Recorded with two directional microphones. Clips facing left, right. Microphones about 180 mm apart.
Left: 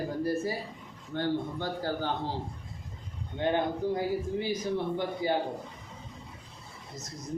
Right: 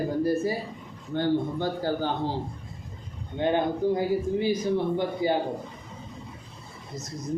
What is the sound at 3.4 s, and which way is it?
Speech, 15° right (ahead or behind).